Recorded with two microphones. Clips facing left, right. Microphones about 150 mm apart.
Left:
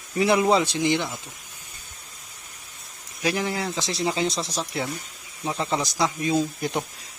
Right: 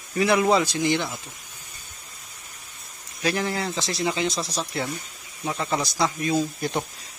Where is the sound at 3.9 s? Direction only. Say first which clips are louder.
Left 1 dB; 30° left (ahead or behind).